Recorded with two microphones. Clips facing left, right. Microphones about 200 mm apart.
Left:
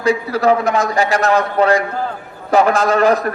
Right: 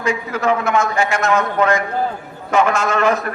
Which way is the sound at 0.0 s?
35° left (ahead or behind).